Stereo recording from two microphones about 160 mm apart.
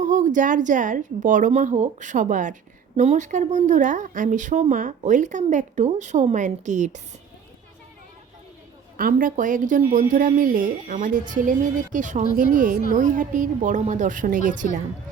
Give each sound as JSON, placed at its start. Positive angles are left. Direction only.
{"t": 0.0, "sound": "a woman's voice", "side_deg": -50}
{"t": 9.0, "sound": "a woman's voice", "side_deg": -65}